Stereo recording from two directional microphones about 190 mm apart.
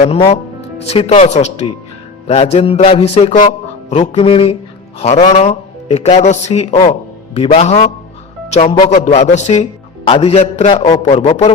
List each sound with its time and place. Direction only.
0.9 s a man's voice: 35° left (ahead or behind)